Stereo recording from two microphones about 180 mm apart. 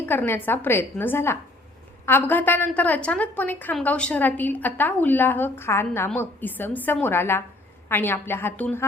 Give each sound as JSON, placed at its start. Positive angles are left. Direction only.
{"t": 0.0, "sound": "a woman's voice", "side_deg": 10}